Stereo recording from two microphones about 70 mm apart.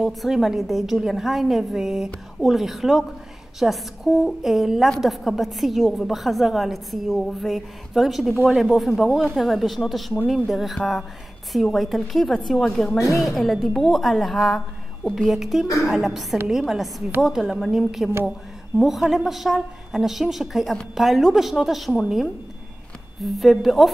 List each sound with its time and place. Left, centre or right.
0.0 s a woman's voice: centre
12.9 s a woman's voice: left
13.2 s a woman's voice: centre
15.6 s a woman's voice: left
15.9 s a woman's voice: centre
23.2 s a woman's voice: centre